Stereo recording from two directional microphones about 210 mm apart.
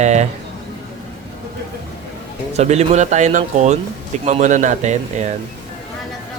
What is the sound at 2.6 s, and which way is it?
Speech, 30° right (ahead or behind).